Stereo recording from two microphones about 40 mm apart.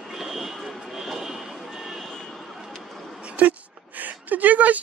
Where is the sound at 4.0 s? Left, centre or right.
Right.